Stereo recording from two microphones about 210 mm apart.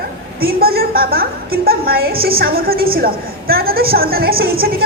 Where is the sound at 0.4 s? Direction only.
45° right (ahead or behind).